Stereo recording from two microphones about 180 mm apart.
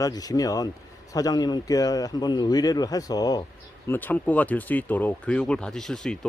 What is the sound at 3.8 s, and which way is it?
Speech, 10° left (ahead or behind).